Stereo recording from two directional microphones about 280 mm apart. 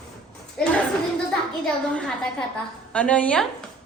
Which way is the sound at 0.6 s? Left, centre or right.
Centre.